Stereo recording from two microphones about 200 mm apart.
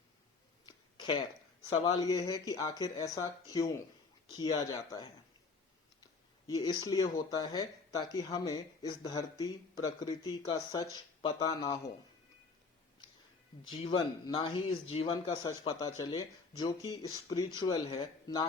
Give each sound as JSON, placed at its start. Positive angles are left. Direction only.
{"t": 0.6, "sound": "a sound", "side_deg": 20}
{"t": 1.7, "sound": "speech", "side_deg": 20}
{"t": 6.5, "sound": "speech", "side_deg": 20}
{"t": 13.8, "sound": "speech", "side_deg": 25}